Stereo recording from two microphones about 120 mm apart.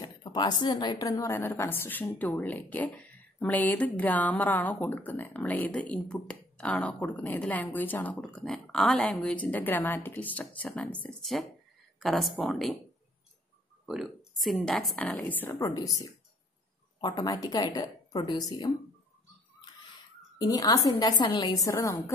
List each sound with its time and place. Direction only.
0.0 s a woman's voice: 35° left (ahead or behind); by 12.7 s centre (ahead or behind)
13.8 s a woman's voice: centre (ahead or behind); by 15.5 s 15° left (ahead or behind)
15.6 s a woman's voice: 30° left (ahead or behind)
20.3 s a woman's voice: 30° left (ahead or behind)